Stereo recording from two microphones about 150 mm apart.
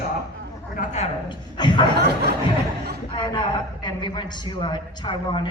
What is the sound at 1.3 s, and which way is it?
Speech, 30° left (ahead or behind).